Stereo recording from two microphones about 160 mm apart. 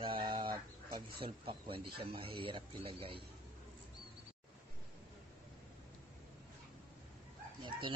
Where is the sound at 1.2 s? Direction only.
35° right (ahead or behind).